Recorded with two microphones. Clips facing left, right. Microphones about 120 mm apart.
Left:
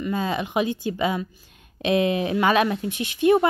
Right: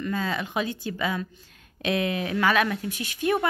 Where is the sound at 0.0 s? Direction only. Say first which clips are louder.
Left 3 dB; 20° left (ahead or behind).